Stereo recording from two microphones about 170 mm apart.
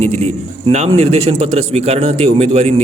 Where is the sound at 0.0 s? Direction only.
40° right (ahead or behind).